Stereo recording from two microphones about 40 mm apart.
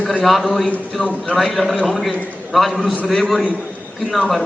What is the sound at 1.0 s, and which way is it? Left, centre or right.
Speech, left.